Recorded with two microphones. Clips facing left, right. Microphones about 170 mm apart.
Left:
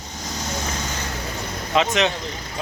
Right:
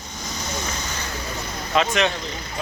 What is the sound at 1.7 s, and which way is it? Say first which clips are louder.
Speech: left 1 dB; 20° left (ahead or behind).